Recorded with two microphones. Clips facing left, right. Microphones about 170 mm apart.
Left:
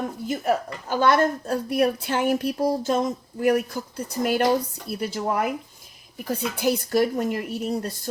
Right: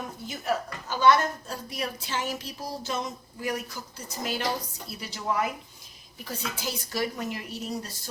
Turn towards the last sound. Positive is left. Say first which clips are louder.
# left 7 dB
turn(degrees=55)  # may be behind; listen again after turning